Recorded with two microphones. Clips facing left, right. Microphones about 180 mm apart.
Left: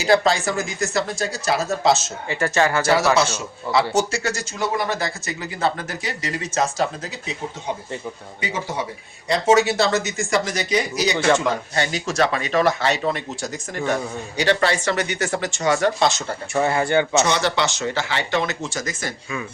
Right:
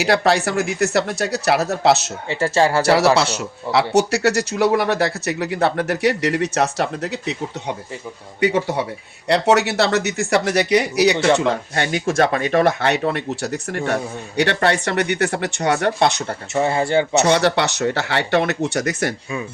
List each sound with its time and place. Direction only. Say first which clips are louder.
0.0 s speech: right 1 dB; 65° right (ahead or behind)
2.3 s speech: right 3 dB; 30° right (ahead or behind)
3.2 s speech: right 3 dB; 65° right (ahead or behind)
8.4 s speech: right 9 dB; 65° right (ahead or behind)
16.6 s speech: right 1 dB; 25° right (ahead or behind)
17.3 s speech: right 4 dB; 65° right (ahead or behind)